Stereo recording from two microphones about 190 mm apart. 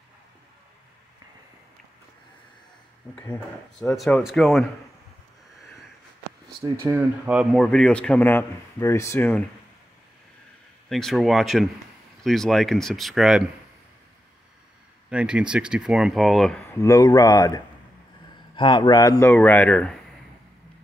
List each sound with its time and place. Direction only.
3.8 s speech: 5° left (ahead or behind)
6.6 s speech: 10° right (ahead or behind)
7.6 s speech: 5° left (ahead or behind)
10.9 s speech: centre (ahead or behind)
15.0 s speech: 5° right (ahead or behind)
16.7 s speech: 15° left (ahead or behind)
18.6 s speech: 25° left (ahead or behind); by 20.0 s 5° left (ahead or behind)